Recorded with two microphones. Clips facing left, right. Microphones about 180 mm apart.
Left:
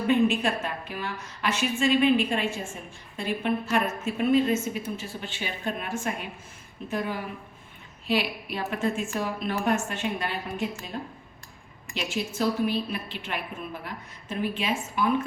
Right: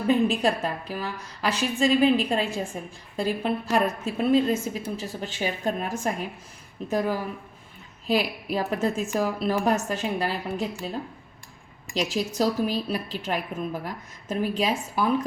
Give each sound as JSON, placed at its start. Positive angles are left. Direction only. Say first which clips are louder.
{"t": 0.1, "sound": "a woman's voice", "louder": "right 1 dB", "side_deg": -35}
{"t": 8.0, "sound": "a woman's voice", "louder": "right 2 dB", "side_deg": -40}
{"t": 11.9, "sound": "a woman's voice", "louder": "right 4 dB", "side_deg": -40}